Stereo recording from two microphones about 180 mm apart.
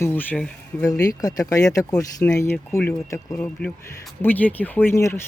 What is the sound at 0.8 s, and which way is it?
Speech, 20° left (ahead or behind).